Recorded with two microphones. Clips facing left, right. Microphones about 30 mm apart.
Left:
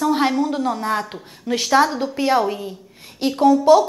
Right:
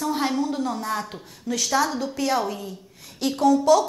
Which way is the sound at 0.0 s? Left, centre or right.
Left.